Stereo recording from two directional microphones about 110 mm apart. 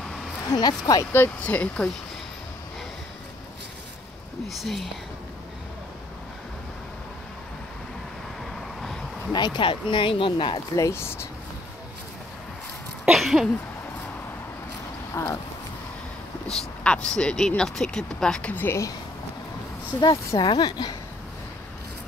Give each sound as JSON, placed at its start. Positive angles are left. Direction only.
{"t": 0.5, "sound": "speech", "side_deg": 40}
{"t": 1.1, "sound": "speech", "side_deg": 15}
{"t": 4.5, "sound": "speech", "side_deg": 0}
{"t": 9.3, "sound": "speech", "side_deg": 40}
{"t": 10.8, "sound": "speech", "side_deg": 25}
{"t": 13.0, "sound": "a sound", "side_deg": 0}
{"t": 15.2, "sound": "speech", "side_deg": 20}
{"t": 16.5, "sound": "speech", "side_deg": 10}
{"t": 20.3, "sound": "speech", "side_deg": 45}